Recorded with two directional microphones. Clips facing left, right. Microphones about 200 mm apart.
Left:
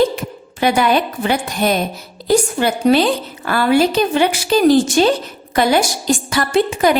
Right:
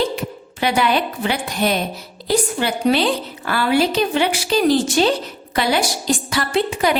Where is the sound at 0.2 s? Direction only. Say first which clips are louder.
Left 3 dB; 45° left (ahead or behind).